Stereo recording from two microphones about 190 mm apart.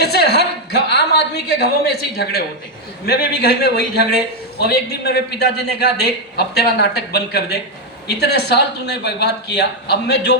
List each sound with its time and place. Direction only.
0.0 s a man's voice: 60° left (ahead or behind)